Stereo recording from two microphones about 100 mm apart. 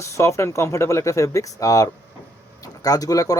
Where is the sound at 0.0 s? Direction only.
30° left (ahead or behind).